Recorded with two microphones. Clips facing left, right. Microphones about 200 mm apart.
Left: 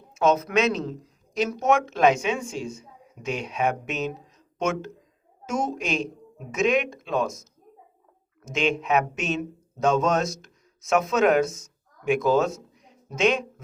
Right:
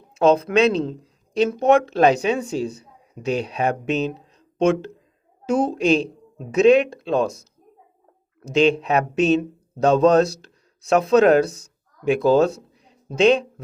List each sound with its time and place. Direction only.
0.1 s a woman's voice: 30° right (ahead or behind)
8.4 s speech: 35° right (ahead or behind)